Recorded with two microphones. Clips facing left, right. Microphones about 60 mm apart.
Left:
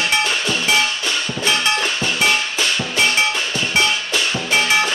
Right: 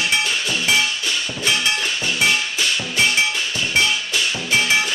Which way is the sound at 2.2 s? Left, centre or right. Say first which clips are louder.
Left 1 dB; left.